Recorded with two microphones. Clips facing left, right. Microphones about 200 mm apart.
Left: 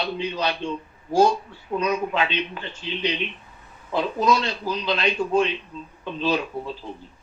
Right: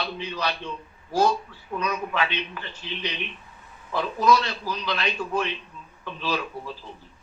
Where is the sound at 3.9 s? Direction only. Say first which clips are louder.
Even; 20° left (ahead or behind).